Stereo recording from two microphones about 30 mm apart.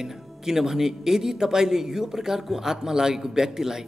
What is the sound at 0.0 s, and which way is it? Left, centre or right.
A man's voice, centre.